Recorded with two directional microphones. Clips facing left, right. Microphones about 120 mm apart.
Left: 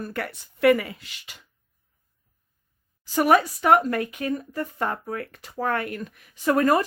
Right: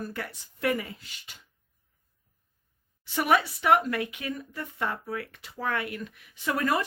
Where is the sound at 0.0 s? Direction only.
60° left (ahead or behind); by 1.4 s 85° left.